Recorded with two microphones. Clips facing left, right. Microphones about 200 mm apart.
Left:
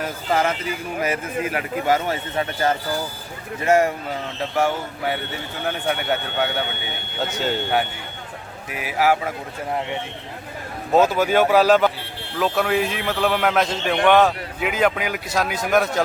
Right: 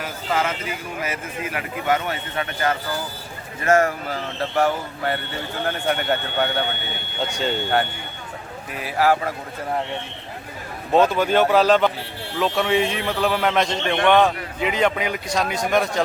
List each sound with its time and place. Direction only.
0.9 s a man's voice: 40° left (ahead or behind)
3.8 s a man's voice: 15° left (ahead or behind)
10.9 s a man's voice: 5° left (ahead or behind)